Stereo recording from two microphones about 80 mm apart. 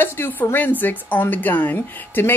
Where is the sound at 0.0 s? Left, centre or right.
Left.